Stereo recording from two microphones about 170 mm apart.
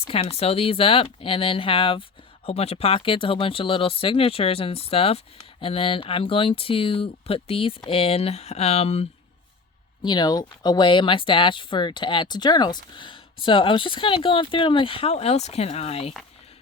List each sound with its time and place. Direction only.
0.1 s speech: 35° left (ahead or behind)
10.0 s speech: 25° left (ahead or behind)